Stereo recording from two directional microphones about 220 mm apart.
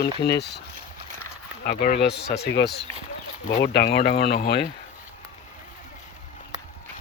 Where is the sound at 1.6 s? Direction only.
45° left (ahead or behind).